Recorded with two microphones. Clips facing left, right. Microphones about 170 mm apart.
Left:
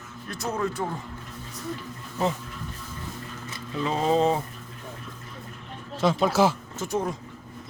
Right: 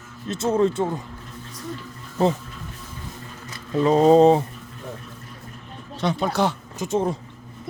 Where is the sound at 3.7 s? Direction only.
40° right (ahead or behind).